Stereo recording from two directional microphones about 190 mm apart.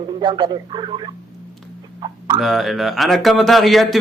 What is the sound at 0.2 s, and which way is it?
Speech, 25° right (ahead or behind).